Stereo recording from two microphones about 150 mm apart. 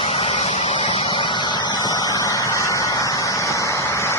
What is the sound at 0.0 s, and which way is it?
Vehicle, 45° left (ahead or behind).